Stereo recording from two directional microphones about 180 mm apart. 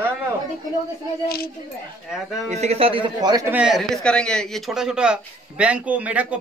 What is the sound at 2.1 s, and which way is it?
Speech, centre (ahead or behind).